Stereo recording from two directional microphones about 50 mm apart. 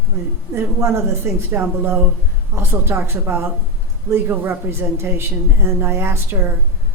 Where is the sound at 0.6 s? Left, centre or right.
Right.